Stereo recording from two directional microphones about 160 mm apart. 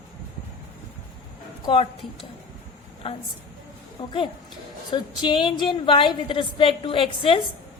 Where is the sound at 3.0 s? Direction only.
35° left (ahead or behind).